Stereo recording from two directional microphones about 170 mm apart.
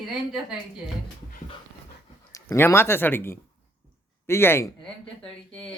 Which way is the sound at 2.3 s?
20° left (ahead or behind).